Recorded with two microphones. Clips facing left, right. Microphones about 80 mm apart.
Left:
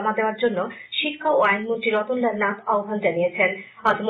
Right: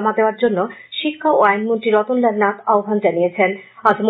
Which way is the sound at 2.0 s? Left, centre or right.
Centre.